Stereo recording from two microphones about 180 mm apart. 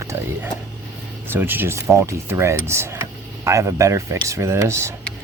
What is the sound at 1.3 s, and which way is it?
Speech, 10° right (ahead or behind).